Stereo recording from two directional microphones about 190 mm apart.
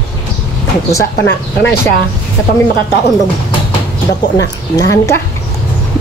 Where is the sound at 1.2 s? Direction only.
60° left (ahead or behind).